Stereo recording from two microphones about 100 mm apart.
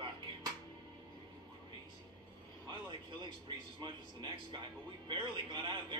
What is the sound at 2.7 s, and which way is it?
A man's voice, 50° right (ahead or behind).